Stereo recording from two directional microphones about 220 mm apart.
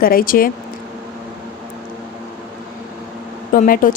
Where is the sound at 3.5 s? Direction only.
40° left (ahead or behind).